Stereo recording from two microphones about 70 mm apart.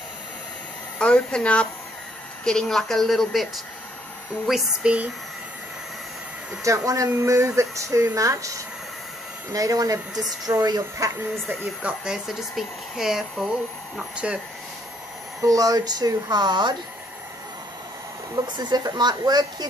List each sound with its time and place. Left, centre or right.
0.9 s speech: centre
4.5 s speech: centre
4.8 s speech: centre
6.6 s speech: right
10.4 s speech: right
11.8 s speech: centre
13.9 s speech: centre
15.4 s speech: right
18.3 s speech: right